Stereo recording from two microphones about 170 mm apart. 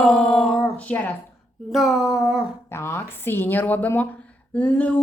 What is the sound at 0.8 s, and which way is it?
Speech, 10° left (ahead or behind).